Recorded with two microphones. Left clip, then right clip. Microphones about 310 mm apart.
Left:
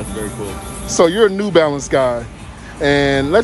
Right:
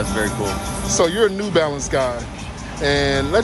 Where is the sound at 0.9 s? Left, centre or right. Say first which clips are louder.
Left 5 dB; left.